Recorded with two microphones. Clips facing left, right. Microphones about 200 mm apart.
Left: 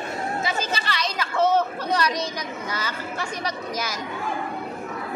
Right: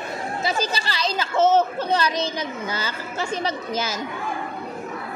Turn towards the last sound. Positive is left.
turn(degrees=-25)  # may be behind; listen again after turning